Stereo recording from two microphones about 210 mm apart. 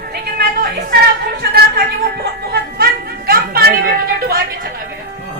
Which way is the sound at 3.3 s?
45° right (ahead or behind).